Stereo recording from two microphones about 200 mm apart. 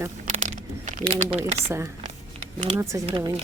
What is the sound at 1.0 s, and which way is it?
Speech, 30° right (ahead or behind).